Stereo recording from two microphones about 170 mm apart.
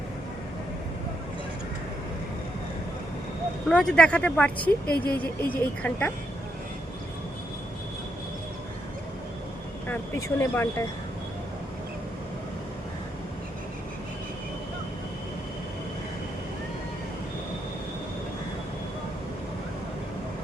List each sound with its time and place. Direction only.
3.7 s speech: 5° left (ahead or behind)
9.9 s speech: 15° left (ahead or behind)